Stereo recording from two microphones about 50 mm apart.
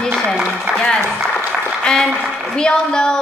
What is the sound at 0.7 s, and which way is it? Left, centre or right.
A woman's voice, centre.